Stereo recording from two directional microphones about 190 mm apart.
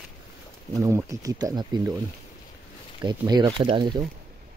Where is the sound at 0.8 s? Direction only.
15° right (ahead or behind).